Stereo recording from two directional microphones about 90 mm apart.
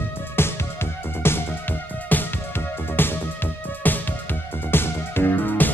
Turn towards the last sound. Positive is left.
turn(degrees=20)  # may be behind; listen again after turning